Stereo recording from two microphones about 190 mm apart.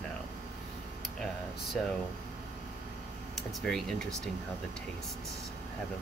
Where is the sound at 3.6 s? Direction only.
Centre (ahead or behind).